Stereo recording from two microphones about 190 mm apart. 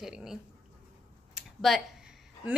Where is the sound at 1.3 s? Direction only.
Centre (ahead or behind).